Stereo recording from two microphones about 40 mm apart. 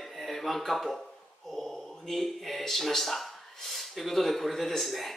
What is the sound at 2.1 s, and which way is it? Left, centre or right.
Speech, centre.